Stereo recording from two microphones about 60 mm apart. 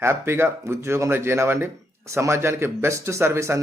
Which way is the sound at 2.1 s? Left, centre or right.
Right.